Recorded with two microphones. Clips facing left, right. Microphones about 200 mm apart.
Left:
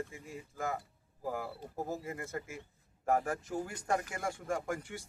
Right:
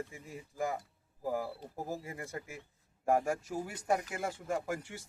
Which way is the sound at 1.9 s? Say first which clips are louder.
Even; 15° right (ahead or behind).